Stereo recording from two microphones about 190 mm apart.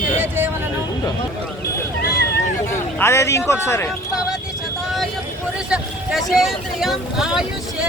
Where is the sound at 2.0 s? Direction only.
55° left (ahead or behind).